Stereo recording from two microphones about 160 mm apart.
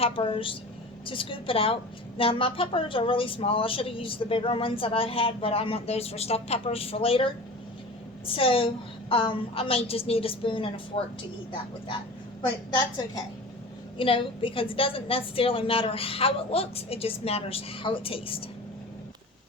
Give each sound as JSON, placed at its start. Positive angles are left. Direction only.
{"t": 0.0, "sound": "a woman's voice", "side_deg": 35}
{"t": 12.4, "sound": "a woman's voice", "side_deg": 25}